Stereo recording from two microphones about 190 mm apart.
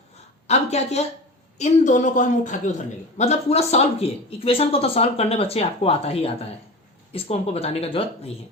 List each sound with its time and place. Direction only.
0.4 s speech: 35° left (ahead or behind)